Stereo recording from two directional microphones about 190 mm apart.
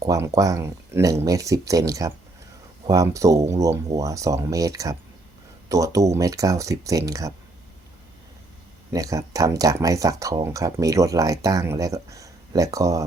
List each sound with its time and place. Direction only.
0.0 s speech: 15° right (ahead or behind)
8.9 s speech: 20° right (ahead or behind)